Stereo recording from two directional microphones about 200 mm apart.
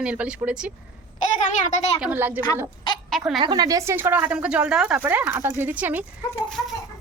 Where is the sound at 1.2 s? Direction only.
35° left (ahead or behind).